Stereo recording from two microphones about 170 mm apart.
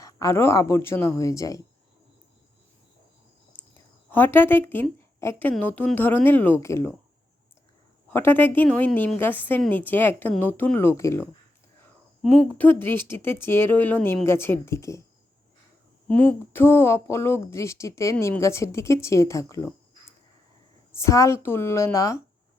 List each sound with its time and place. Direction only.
0.0 s speech: 20° left (ahead or behind)
4.1 s speech: 10° left (ahead or behind)
8.1 s speech: 10° left (ahead or behind)
12.2 s speech: 5° left (ahead or behind)
16.0 s speech: 5° left (ahead or behind)
20.9 s speech: 15° left (ahead or behind)